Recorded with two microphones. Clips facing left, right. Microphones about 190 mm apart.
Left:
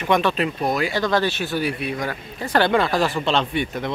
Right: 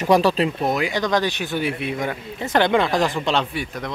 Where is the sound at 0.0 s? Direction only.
35° right (ahead or behind).